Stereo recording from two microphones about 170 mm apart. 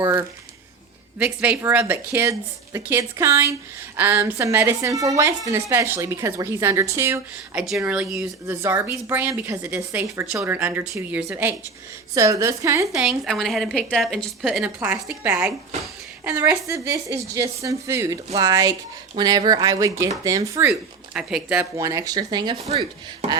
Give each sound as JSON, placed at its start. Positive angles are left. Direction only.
{"t": 1.2, "sound": "a woman's voice", "side_deg": -10}
{"t": 13.0, "sound": "a woman's voice", "side_deg": 0}
{"t": 21.8, "sound": "speech", "side_deg": -20}